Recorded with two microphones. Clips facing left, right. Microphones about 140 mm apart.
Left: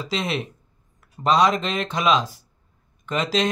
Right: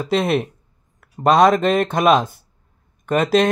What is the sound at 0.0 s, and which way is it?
Speech, 55° right (ahead or behind).